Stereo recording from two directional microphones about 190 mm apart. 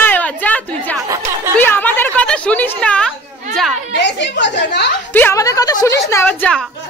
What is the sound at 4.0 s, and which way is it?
Speech, 65° left (ahead or behind).